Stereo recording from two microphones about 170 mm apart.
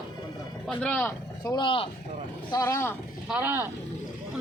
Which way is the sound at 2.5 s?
20° left (ahead or behind).